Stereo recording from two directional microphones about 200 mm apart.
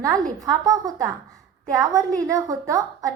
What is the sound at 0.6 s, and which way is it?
A woman's voice, 15° right (ahead or behind).